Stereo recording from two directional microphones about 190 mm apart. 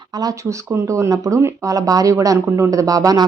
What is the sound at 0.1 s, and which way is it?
A woman's voice, 20° right (ahead or behind).